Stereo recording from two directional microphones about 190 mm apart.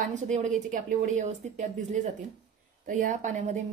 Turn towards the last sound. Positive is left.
turn(degrees=-40)  # may be behind; listen again after turning